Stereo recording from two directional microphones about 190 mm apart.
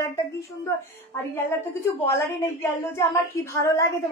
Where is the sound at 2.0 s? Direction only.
15° left (ahead or behind).